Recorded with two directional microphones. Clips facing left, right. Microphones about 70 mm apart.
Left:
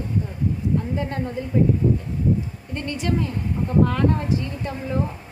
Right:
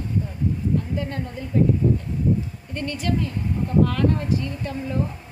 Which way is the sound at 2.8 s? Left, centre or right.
Left.